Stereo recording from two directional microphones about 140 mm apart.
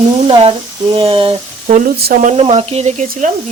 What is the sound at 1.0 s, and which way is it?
Speech, 40° right (ahead or behind).